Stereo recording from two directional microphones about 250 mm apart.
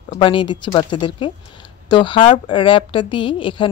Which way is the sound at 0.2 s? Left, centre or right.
Centre.